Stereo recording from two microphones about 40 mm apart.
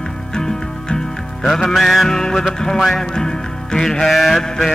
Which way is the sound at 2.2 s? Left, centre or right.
Centre.